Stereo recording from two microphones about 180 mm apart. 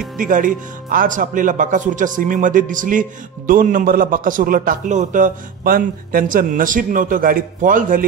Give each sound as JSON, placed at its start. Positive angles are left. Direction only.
{"t": 0.2, "sound": "speech", "side_deg": -50}